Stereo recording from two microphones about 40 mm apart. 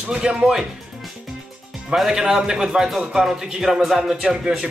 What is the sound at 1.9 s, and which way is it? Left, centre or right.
A man's voice, centre.